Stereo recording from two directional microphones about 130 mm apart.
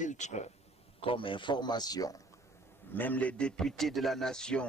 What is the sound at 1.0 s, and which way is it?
A man's voice, 45° left (ahead or behind).